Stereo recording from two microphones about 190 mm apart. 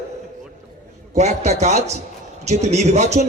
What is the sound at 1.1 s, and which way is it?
A man's voice, 35° right (ahead or behind).